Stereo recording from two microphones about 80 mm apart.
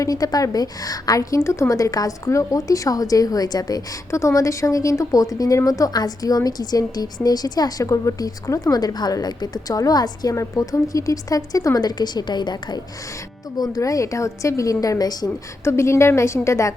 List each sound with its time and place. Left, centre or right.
0.0 s a woman's voice: left
4.1 s a woman's voice: left
13.6 s a woman's voice: left
15.6 s a woman's voice: left